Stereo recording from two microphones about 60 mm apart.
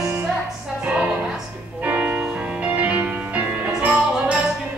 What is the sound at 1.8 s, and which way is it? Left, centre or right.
Music, right.